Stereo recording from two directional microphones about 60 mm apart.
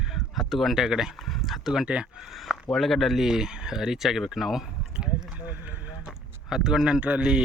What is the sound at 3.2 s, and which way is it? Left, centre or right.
Speech, centre.